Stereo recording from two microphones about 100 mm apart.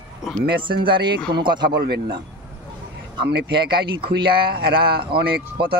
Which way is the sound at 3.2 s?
55° right (ahead or behind).